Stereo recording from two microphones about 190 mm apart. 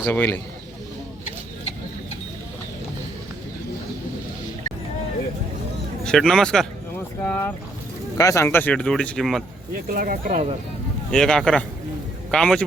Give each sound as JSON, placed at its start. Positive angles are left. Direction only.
{"t": 0.0, "sound": "speech", "side_deg": 10}
{"t": 6.1, "sound": "speech", "side_deg": 0}
{"t": 9.7, "sound": "speech", "side_deg": -50}
{"t": 11.1, "sound": "speech", "side_deg": 5}